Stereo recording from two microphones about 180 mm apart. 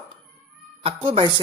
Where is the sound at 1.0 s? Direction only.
30° right (ahead or behind).